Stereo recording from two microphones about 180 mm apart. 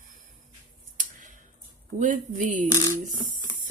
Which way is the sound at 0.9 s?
45° right (ahead or behind).